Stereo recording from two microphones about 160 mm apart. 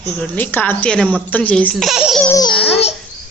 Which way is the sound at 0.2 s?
10° left (ahead or behind).